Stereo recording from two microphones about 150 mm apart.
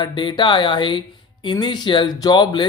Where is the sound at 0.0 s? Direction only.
30° left (ahead or behind).